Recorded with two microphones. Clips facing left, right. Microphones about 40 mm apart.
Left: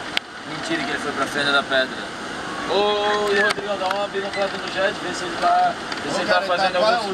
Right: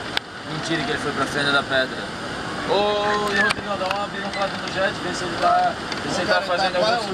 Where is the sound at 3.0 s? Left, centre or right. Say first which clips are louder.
Left 1 dB; centre.